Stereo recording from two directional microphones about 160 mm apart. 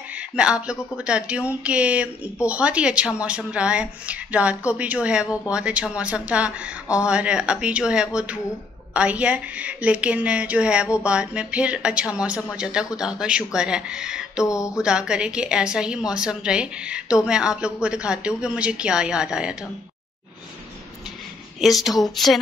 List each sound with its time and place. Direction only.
0.1 s a woman's voice: 5° right (ahead or behind)
14.4 s a sound: 20° left (ahead or behind)
14.8 s a woman's voice: 5° right (ahead or behind)
21.5 s a woman's voice: centre (ahead or behind)